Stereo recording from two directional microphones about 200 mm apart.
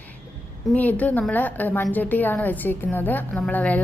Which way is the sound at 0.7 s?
10° left (ahead or behind).